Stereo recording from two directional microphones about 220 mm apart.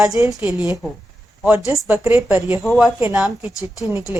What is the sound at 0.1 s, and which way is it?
Speech, 15° right (ahead or behind).